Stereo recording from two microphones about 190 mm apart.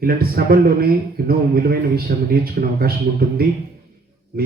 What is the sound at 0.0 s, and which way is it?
A man's voice, 50° right (ahead or behind).